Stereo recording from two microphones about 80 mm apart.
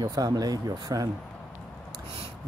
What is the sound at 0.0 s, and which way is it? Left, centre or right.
Speech, right.